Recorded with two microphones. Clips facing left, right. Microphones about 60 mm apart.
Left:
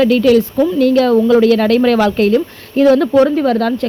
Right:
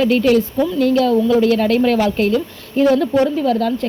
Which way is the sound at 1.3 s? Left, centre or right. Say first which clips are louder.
Left 4 dB; left.